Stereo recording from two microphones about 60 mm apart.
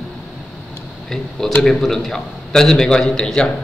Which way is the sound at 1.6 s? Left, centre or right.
Centre.